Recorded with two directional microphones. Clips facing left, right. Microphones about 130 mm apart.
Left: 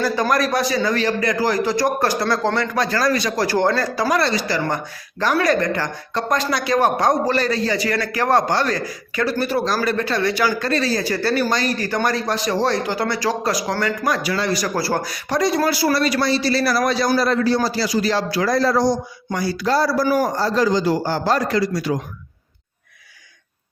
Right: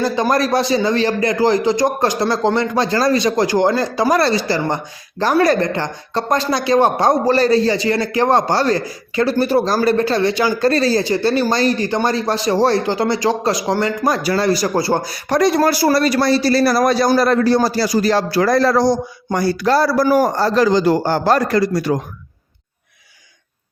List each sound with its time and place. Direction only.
0.0 s speech: 25° right (ahead or behind)
4.1 s a woman's voice: 35° right (ahead or behind)
10.7 s speech: 35° right (ahead or behind)
15.3 s a man's voice: 55° right (ahead or behind)
15.6 s a man's voice: 40° right (ahead or behind)
18.5 s speech: 65° right (ahead or behind)
19.3 s a man's voice: 50° right (ahead or behind)